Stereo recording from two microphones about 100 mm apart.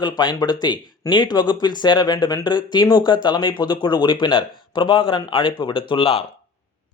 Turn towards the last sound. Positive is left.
turn(degrees=65)  # may be behind; listen again after turning